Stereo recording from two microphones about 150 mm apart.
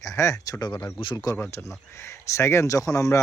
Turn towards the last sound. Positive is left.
turn(degrees=20)  # may be behind; listen again after turning